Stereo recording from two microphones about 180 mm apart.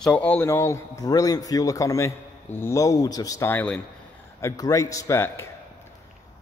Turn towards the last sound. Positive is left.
turn(degrees=15)  # may be behind; listen again after turning